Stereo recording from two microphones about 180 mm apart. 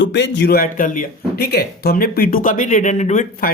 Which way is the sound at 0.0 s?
80° left.